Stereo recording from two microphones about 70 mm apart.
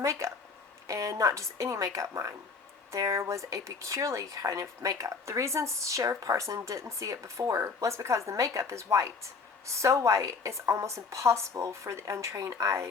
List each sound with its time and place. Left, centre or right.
0.0 s speech: right